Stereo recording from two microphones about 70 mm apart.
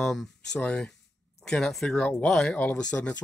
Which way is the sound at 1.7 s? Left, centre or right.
Centre.